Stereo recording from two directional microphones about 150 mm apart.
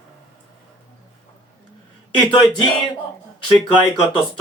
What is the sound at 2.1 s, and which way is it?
Speech, 30° left (ahead or behind).